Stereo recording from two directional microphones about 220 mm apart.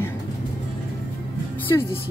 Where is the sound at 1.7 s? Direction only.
15° left (ahead or behind).